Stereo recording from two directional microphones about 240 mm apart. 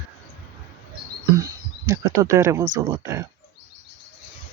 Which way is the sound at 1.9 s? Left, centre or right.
Centre.